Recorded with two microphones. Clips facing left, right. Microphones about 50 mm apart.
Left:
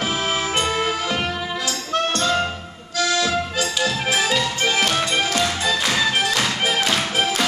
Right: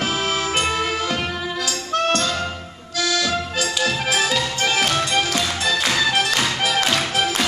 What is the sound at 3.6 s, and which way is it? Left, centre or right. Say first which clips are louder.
Music: right 1 dB; centre.